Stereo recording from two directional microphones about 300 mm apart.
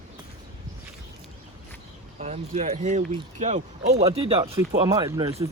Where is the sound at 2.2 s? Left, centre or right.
Right.